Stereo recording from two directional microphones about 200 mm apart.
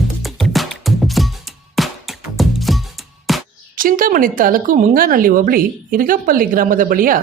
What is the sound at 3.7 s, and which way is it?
A woman's voice, 45° right (ahead or behind).